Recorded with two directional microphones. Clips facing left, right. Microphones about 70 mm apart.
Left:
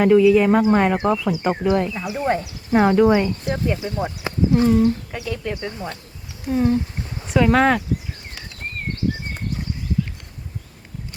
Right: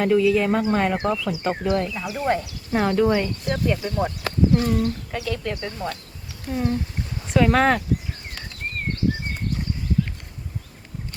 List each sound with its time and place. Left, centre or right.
0.0 s speech: centre
7.3 s speech: centre